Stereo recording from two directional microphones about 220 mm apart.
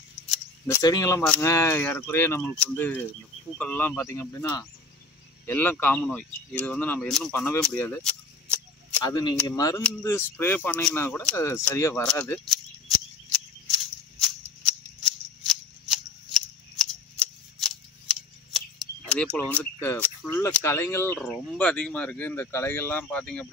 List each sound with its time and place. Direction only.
0.7 s speech: 15° left (ahead or behind)
9.0 s speech: 20° left (ahead or behind)
15.0 s scissors: centre (ahead or behind)
19.0 s speech: 5° left (ahead or behind)